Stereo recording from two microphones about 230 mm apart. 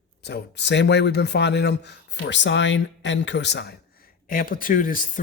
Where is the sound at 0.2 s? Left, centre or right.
Left.